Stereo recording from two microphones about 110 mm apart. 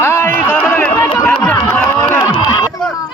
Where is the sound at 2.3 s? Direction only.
45° left (ahead or behind).